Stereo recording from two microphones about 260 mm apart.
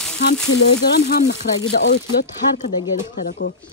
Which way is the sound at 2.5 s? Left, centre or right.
Left.